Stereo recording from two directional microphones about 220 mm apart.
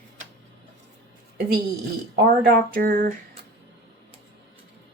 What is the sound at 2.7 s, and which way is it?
Speech, 40° right (ahead or behind).